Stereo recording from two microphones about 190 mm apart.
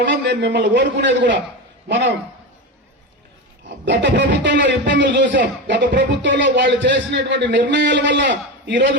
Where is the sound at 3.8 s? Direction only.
65° right (ahead or behind).